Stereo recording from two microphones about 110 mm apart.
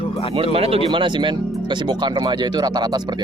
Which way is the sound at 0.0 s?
60° left (ahead or behind).